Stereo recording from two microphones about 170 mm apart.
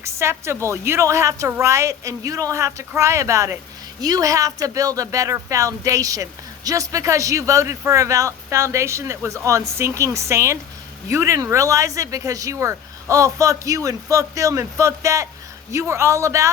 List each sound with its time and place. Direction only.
0.0 s speech: 15° right (ahead or behind)